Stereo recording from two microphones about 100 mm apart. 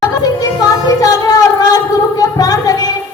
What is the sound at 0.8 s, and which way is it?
Music, 40° left (ahead or behind).